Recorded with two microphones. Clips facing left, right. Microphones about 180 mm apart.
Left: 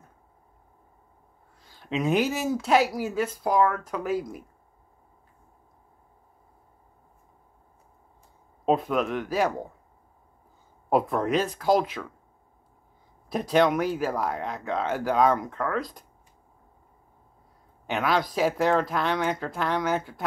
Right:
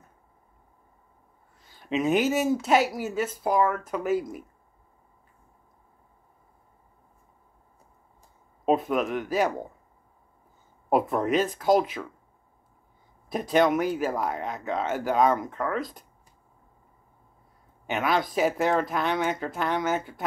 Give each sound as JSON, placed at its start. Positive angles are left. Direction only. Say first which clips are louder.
{"t": 1.8, "sound": "speech", "louder": "right 1 dB", "side_deg": -5}
{"t": 8.6, "sound": "speech", "louder": "even", "side_deg": -5}
{"t": 10.9, "sound": "speech", "louder": "even", "side_deg": 0}
{"t": 13.3, "sound": "speech", "louder": "even", "side_deg": 0}
{"t": 17.8, "sound": "speech", "louder": "even", "side_deg": 0}